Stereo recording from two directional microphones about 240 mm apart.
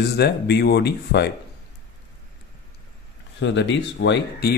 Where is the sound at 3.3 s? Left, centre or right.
Left.